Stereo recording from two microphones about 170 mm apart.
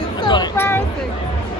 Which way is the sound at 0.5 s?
15° left (ahead or behind).